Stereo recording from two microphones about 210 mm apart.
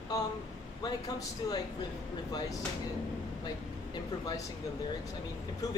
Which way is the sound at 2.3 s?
20° left (ahead or behind).